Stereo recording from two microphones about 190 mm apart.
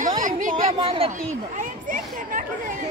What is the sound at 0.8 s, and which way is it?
Speech, 30° right (ahead or behind).